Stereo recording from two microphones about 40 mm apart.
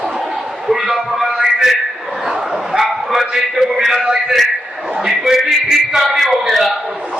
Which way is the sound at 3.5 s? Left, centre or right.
Centre.